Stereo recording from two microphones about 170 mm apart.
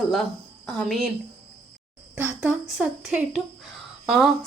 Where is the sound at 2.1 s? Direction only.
5° right (ahead or behind).